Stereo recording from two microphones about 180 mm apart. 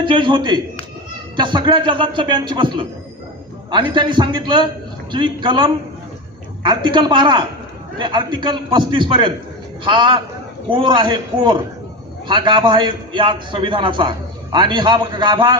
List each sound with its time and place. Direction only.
0.0 s a man's voice: 25° right (ahead or behind)